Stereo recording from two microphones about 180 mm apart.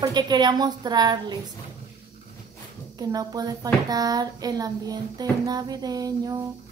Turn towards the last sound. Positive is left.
turn(degrees=-20)  # may be behind; listen again after turning